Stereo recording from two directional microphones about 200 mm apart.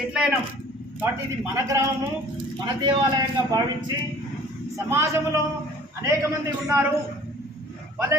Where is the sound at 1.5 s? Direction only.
15° right (ahead or behind).